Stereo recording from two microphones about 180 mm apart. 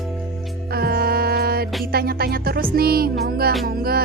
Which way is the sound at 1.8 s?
60° right (ahead or behind).